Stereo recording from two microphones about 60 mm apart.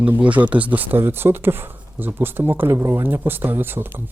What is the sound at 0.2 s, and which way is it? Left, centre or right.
Speech, right.